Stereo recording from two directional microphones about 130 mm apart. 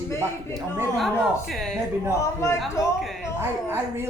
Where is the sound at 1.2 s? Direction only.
Centre (ahead or behind).